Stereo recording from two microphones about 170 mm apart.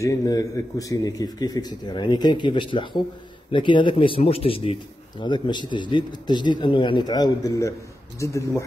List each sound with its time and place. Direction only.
0.0 s a man's voice: 20° left (ahead or behind)